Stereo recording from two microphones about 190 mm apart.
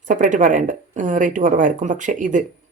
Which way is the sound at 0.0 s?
40° right (ahead or behind).